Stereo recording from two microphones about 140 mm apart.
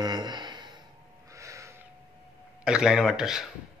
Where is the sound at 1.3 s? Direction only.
20° right (ahead or behind).